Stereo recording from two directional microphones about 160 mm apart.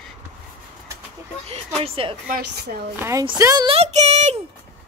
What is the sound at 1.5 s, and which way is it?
Speech, 35° right (ahead or behind).